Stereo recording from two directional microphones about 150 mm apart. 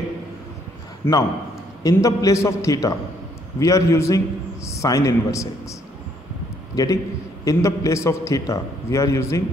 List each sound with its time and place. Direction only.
1.0 s a man's voice: 15° left (ahead or behind)
6.7 s a man's voice: 25° left (ahead or behind)